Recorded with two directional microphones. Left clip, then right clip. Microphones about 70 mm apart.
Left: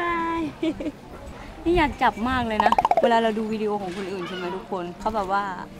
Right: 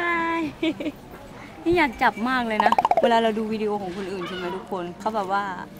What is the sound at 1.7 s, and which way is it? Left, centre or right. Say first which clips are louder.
Speech: even; centre.